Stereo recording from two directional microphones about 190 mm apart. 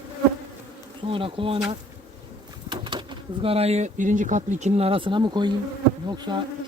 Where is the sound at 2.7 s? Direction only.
25° right (ahead or behind).